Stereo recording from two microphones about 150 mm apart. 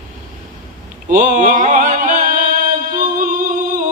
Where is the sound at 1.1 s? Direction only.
60° right (ahead or behind).